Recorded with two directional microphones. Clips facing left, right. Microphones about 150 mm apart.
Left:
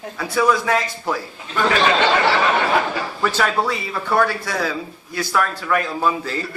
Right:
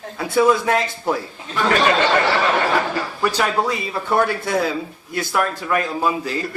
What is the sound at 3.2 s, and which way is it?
Speech, 15° right (ahead or behind).